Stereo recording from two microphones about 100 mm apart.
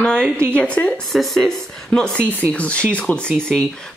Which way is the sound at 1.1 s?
Centre (ahead or behind).